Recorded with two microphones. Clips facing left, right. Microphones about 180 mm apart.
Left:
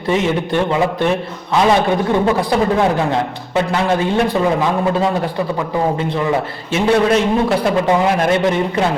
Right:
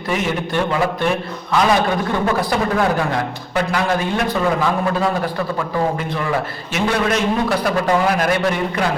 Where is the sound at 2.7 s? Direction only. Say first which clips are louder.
Left 3 dB; 25° left (ahead or behind).